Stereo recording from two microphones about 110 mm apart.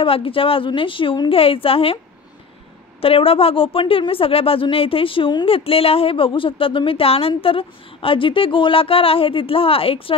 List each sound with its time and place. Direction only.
0.0 s a woman's voice: 55° left (ahead or behind)
1.3 s speech: 60° left (ahead or behind)
3.0 s speech: 60° left (ahead or behind)